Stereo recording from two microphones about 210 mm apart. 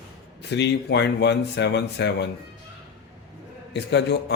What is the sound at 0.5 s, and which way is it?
A man's voice, 55° left (ahead or behind).